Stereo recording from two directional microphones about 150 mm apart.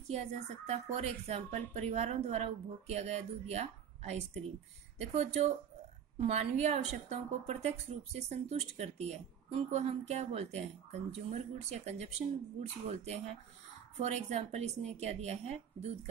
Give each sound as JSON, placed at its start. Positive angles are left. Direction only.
{"t": 0.1, "sound": "a woman's voice", "side_deg": -45}